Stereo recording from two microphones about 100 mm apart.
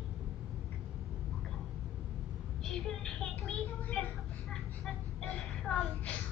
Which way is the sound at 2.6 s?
5° left (ahead or behind).